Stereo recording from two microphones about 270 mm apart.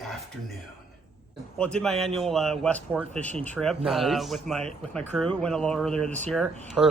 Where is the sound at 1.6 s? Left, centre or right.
Centre.